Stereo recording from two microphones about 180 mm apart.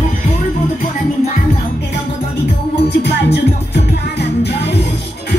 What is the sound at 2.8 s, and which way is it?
Music, 70° left (ahead or behind).